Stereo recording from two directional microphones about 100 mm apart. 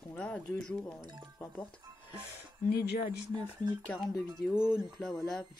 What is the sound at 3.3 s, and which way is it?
Speech, 50° right (ahead or behind).